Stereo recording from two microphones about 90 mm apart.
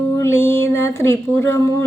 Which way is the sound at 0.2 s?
25° left (ahead or behind).